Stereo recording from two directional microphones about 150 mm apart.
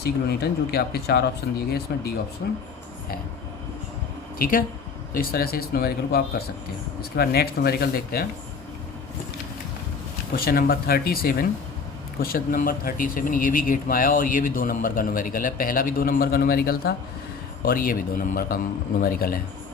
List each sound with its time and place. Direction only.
0.0 s speech: 90° left
4.4 s speech: 70° left (ahead or behind)
5.1 s speech: 85° left
10.3 s speech: 85° left